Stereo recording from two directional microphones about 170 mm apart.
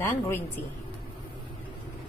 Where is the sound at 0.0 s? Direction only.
15° left (ahead or behind).